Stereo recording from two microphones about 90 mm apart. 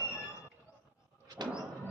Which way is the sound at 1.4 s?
55° right (ahead or behind).